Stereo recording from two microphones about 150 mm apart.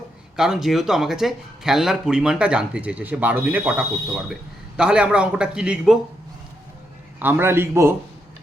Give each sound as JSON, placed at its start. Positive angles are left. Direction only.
{"t": 0.3, "sound": "a man's voice", "side_deg": -5}
{"t": 7.2, "sound": "a man's voice", "side_deg": -15}